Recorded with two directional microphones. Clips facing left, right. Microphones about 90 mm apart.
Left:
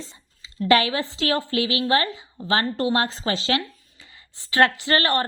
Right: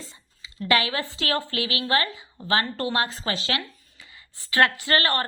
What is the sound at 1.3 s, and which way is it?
A woman's voice, 20° left (ahead or behind).